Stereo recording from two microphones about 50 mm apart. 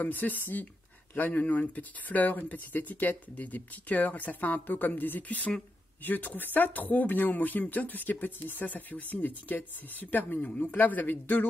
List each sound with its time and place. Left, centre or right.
0.0 s speech: left